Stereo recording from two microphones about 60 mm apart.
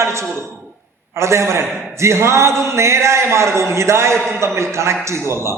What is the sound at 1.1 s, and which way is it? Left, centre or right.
A man's voice, right.